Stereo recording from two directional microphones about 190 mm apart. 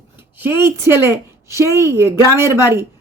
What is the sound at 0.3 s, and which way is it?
A woman's voice, 10° right (ahead or behind).